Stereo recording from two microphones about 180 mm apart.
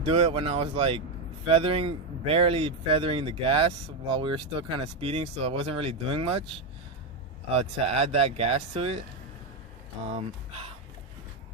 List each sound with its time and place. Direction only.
0.0 s speech: 30° right (ahead or behind)
7.5 s speech: 35° right (ahead or behind)